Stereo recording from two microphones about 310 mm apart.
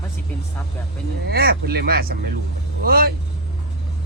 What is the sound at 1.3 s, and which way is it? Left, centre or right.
Speech, right.